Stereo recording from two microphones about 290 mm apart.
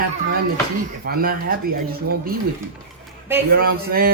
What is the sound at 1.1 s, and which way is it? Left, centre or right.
Speech, right.